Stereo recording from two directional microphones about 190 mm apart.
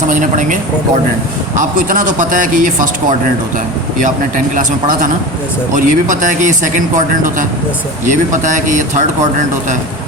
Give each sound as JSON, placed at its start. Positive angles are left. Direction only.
{"t": 0.1, "sound": "speech", "side_deg": -40}
{"t": 2.0, "sound": "speech", "side_deg": -45}
{"t": 5.7, "sound": "speech", "side_deg": -40}